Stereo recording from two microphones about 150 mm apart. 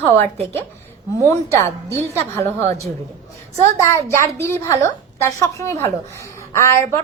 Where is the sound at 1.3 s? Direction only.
20° left (ahead or behind).